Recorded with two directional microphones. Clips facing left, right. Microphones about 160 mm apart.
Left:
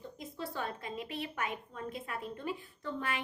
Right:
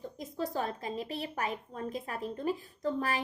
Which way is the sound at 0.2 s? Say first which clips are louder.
Right 5 dB; 40° right (ahead or behind).